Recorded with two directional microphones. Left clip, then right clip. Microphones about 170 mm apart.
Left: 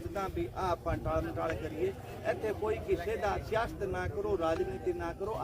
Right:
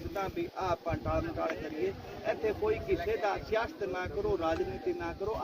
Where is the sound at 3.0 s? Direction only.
5° left (ahead or behind).